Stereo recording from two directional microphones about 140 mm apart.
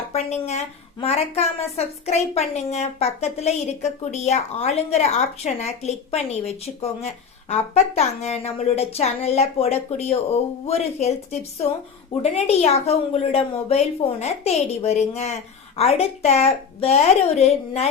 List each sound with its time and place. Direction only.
0.1 s a woman's voice: 50° left (ahead or behind)